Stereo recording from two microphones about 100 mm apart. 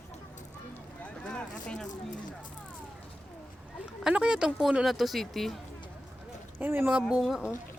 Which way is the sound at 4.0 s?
10° right (ahead or behind).